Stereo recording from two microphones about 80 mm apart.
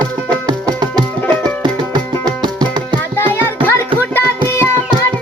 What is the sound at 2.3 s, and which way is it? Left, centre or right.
Music, right.